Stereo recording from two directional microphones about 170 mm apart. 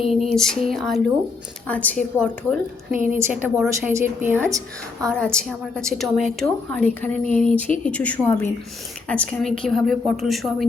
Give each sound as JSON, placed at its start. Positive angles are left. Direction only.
{"t": 0.0, "sound": "a woman's voice", "side_deg": 0}
{"t": 3.2, "sound": "a woman's voice", "side_deg": -15}
{"t": 5.1, "sound": "a woman's voice", "side_deg": 5}